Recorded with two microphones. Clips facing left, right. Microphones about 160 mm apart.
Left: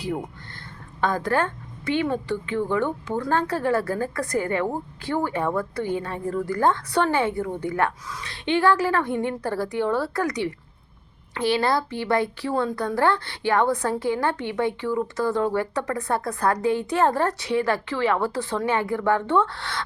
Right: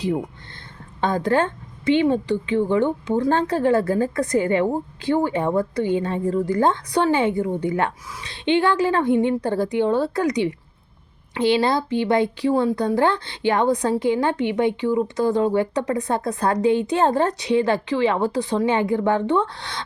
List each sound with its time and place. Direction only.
1.0 s speech: 20° right (ahead or behind)